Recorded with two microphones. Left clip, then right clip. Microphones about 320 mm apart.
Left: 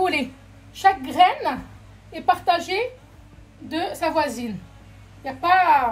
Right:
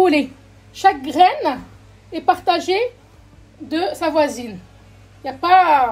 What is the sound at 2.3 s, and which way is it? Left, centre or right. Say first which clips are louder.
Speech: right 3 dB; right.